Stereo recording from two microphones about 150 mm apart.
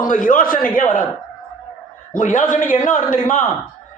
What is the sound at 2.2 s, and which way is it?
Speech, 60° left (ahead or behind).